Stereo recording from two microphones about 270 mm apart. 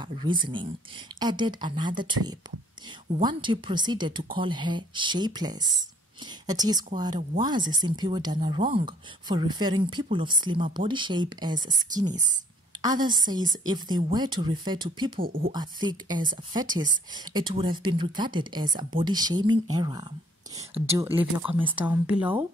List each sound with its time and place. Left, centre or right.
0.0 s speech: centre
12.1 s speech: right
12.8 s speech: centre
15.1 s speech: right
15.5 s speech: centre
21.0 s speech: centre
21.5 s speech: centre
21.7 s speech: centre